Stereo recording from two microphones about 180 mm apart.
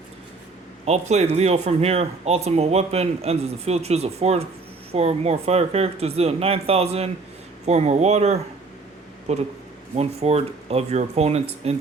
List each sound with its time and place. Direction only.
0.9 s speech: 35° right (ahead or behind)